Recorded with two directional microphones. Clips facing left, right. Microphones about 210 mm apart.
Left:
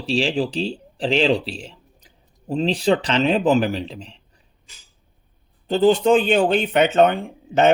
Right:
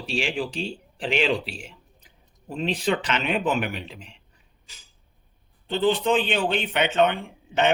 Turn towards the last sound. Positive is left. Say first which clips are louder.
# left 6 dB
turn(degrees=40)  # may be behind; listen again after turning